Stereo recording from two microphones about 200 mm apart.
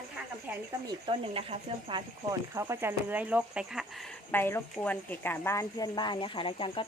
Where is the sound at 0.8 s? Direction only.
25° right (ahead or behind).